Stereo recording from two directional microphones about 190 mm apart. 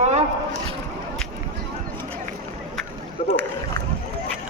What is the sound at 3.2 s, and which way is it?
Speech, 40° left (ahead or behind).